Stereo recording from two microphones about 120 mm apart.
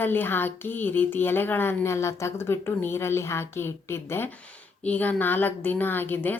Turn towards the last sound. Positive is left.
turn(degrees=15)  # may be behind; listen again after turning